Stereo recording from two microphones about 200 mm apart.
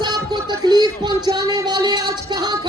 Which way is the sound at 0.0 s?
20° right (ahead or behind).